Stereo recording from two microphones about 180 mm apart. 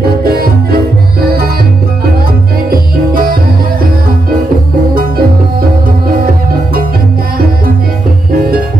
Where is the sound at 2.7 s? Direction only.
55° right (ahead or behind).